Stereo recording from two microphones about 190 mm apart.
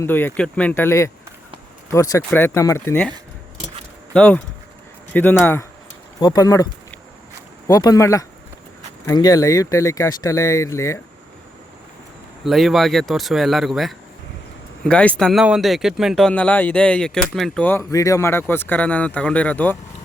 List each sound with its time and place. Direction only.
0.0 s speech: 10° left (ahead or behind)
4.1 s speech: 5° left (ahead or behind)
7.7 s speech: 20° left (ahead or behind)
12.4 s speech: centre (ahead or behind)